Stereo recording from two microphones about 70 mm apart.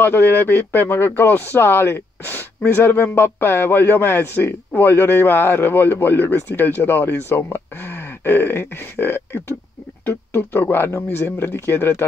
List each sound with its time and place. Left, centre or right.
0.0 s speech: left